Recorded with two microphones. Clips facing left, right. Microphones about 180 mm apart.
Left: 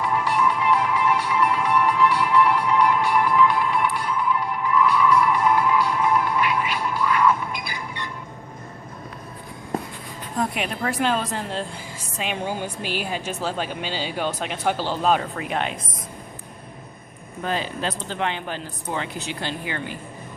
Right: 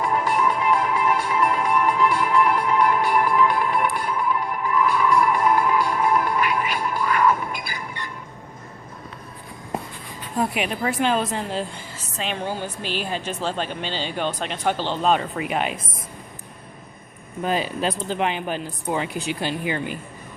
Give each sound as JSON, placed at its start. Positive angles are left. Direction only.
{"t": 0.0, "sound": "music", "side_deg": -45}
{"t": 10.3, "sound": "speech", "side_deg": -5}
{"t": 11.9, "sound": "a woman's voice", "side_deg": 10}
{"t": 17.4, "sound": "speech", "side_deg": -15}